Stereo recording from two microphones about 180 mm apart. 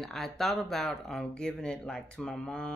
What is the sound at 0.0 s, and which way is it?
Speech, centre (ahead or behind).